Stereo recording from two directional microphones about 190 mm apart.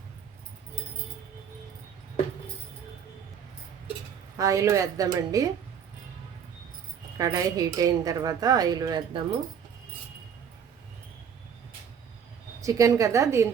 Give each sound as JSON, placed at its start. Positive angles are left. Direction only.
{"t": 4.4, "sound": "a woman's voice", "side_deg": -15}
{"t": 7.2, "sound": "a woman's voice", "side_deg": -20}
{"t": 12.6, "sound": "a woman's voice", "side_deg": -15}